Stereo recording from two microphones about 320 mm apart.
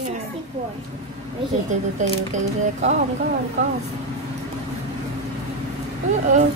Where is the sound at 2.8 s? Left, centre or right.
Right.